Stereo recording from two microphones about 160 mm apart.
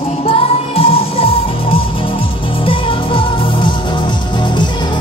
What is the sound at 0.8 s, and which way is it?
Music, 35° left (ahead or behind).